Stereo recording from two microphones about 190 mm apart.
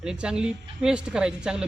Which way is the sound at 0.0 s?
5° right (ahead or behind).